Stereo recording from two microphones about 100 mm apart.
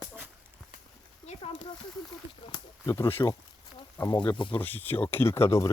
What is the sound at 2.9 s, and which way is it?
Speech, 25° left (ahead or behind).